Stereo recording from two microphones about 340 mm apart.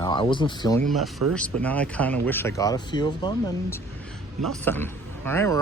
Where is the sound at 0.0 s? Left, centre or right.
Centre.